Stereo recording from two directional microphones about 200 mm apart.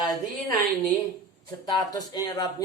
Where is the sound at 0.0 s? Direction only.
20° left (ahead or behind).